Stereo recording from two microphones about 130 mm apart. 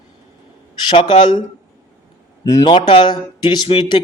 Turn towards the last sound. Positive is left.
turn(degrees=40)  # may be behind; listen again after turning